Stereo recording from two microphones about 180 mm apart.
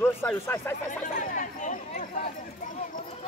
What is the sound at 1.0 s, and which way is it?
Speech, 45° left (ahead or behind).